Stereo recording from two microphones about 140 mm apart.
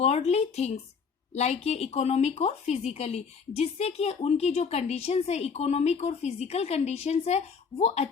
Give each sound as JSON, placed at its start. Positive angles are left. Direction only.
{"t": 0.0, "sound": "a woman's voice", "side_deg": 50}